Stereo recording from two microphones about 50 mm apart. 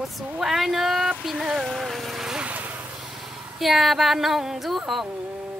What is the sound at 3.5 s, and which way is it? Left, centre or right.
Speech, centre.